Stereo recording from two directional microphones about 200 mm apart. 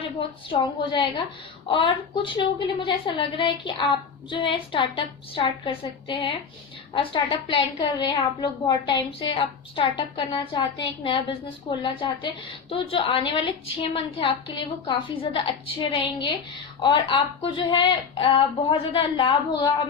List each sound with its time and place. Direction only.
0.2 s a woman's voice: 25° left (ahead or behind)